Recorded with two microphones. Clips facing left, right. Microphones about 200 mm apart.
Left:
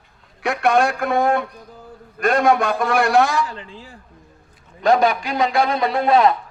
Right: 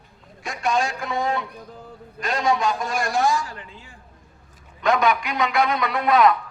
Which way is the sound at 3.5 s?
35° left (ahead or behind).